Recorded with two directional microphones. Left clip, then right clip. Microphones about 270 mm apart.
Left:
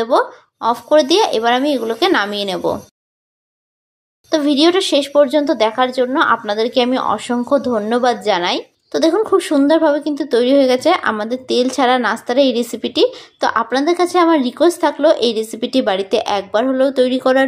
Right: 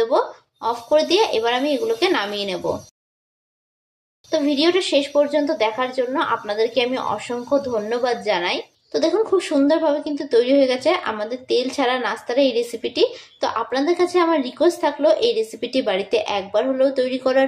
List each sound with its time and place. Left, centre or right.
0.0 s speech: left
4.3 s speech: left